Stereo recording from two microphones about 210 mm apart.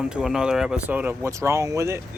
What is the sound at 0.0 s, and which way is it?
Speech, 5° right (ahead or behind).